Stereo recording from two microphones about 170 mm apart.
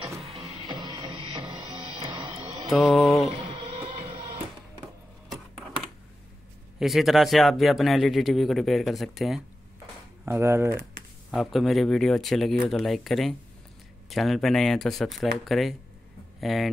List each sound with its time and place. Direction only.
0.0 s music: 35° right (ahead or behind)
2.7 s speech: centre (ahead or behind)
3.3 s music: 35° right (ahead or behind)
6.8 s speech: centre (ahead or behind)
10.2 s speech: 15° right (ahead or behind)
11.3 s speech: centre (ahead or behind)